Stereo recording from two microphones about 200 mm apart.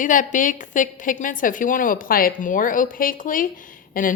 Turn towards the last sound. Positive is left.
turn(degrees=45)  # may be behind; listen again after turning